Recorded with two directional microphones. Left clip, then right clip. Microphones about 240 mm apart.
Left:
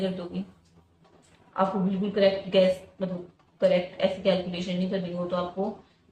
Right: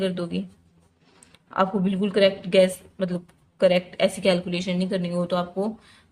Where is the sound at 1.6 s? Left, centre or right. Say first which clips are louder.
Right 3 dB; right.